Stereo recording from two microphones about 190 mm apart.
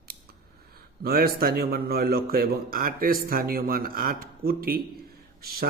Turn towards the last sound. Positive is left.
turn(degrees=-55)  # may be behind; listen again after turning